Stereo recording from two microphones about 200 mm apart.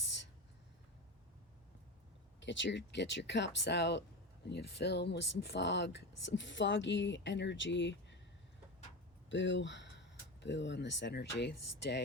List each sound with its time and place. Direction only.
2.4 s speech: 65° left (ahead or behind)
9.3 s speech: 65° left (ahead or behind)